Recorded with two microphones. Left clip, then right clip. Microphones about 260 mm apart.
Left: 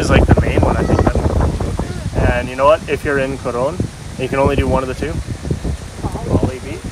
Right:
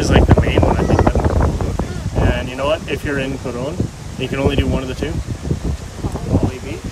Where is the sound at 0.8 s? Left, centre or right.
Left.